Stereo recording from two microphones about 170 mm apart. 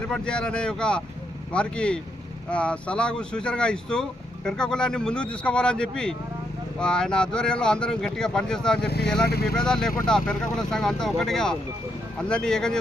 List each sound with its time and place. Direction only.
0.1 s speech: 5° left (ahead or behind)
9.3 s speech: 65° left (ahead or behind)
9.6 s speech: 5° left (ahead or behind)